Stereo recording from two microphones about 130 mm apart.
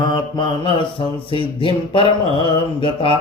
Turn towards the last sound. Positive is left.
turn(degrees=40)  # may be behind; listen again after turning